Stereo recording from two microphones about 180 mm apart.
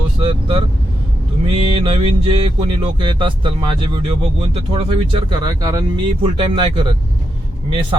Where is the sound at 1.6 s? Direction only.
30° right (ahead or behind).